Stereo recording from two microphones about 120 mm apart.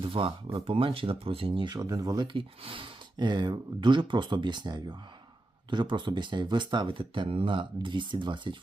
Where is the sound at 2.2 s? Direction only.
45° right (ahead or behind).